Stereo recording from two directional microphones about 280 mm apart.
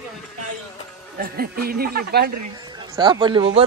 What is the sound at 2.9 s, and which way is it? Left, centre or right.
Speech, centre.